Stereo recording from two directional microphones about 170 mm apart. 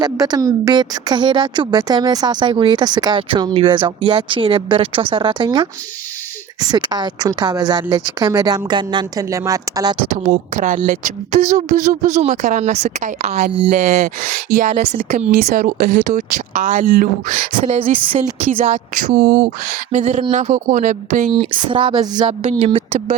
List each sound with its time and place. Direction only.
0.0 s a woman's voice: 20° right (ahead or behind)
10.1 s speech: 45° right (ahead or behind)
17.6 s speech: 35° right (ahead or behind)
19.1 s speech: 70° right (ahead or behind); by 21.2 s 45° right (ahead or behind)
21.3 s a woman's voice: 30° right (ahead or behind)
22.4 s speech: 40° right (ahead or behind)